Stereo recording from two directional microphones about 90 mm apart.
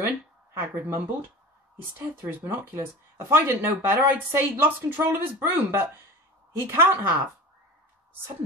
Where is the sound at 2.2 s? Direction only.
25° right (ahead or behind).